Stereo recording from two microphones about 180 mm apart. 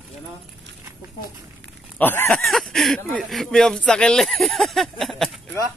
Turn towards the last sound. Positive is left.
turn(degrees=0)  # may be behind; listen again after turning